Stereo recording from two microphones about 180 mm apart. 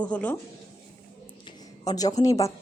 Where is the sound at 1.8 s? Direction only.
20° left (ahead or behind).